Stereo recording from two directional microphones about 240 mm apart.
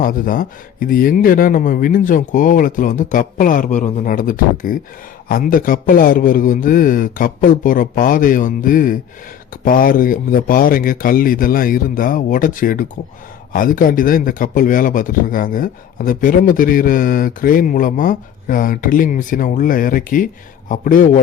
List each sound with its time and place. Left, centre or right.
0.0 s speech: left